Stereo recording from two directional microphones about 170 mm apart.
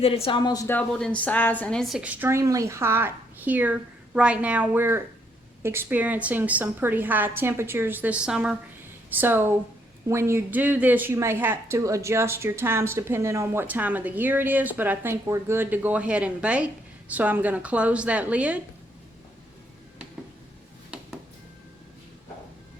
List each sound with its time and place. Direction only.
0.0 s speech: 35° left (ahead or behind)
0.8 s speech: 5° left (ahead or behind)